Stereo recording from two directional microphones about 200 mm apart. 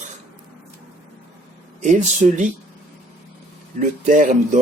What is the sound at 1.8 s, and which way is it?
Speech, 35° right (ahead or behind).